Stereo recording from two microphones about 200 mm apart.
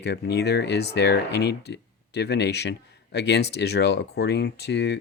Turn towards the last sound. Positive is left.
turn(degrees=60)  # may be behind; listen again after turning